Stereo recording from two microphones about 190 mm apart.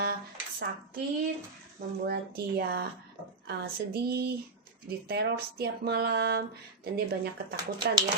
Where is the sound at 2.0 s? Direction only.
55° right (ahead or behind).